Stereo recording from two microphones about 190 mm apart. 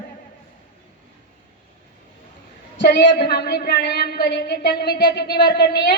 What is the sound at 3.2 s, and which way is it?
A woman's voice, 55° left (ahead or behind).